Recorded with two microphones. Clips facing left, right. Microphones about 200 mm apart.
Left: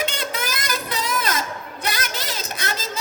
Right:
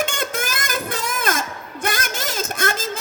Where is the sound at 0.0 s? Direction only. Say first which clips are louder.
Right 2 dB; 50° right (ahead or behind).